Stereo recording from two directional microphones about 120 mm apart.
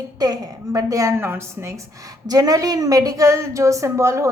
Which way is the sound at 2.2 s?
35° right (ahead or behind).